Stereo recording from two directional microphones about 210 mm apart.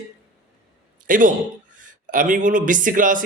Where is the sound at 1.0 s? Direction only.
40° right (ahead or behind).